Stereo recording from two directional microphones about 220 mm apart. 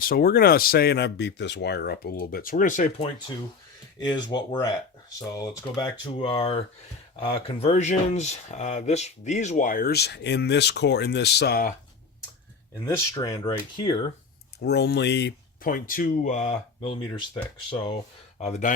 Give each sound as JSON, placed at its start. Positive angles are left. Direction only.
{"t": 0.0, "sound": "speech", "side_deg": 40}
{"t": 4.1, "sound": "speech", "side_deg": 20}
{"t": 12.8, "sound": "speech", "side_deg": 15}
{"t": 14.6, "sound": "speech", "side_deg": 50}